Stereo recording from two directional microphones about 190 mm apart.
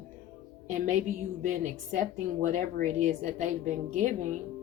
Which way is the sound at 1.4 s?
40° right (ahead or behind).